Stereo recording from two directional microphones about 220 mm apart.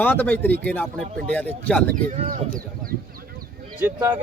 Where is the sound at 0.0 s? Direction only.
10° left (ahead or behind).